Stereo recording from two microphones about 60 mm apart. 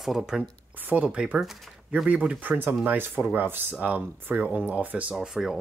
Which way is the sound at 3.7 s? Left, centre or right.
Right.